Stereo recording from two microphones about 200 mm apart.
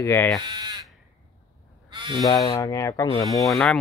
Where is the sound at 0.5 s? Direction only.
20° right (ahead or behind).